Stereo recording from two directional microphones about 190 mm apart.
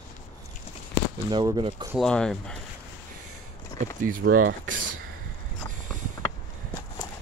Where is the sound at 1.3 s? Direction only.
25° right (ahead or behind).